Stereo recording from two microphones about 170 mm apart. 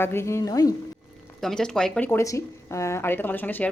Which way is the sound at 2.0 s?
15° left (ahead or behind).